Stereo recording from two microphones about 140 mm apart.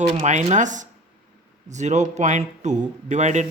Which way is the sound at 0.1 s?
50° right (ahead or behind).